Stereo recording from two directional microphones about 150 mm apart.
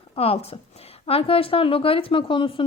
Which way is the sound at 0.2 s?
40° left (ahead or behind).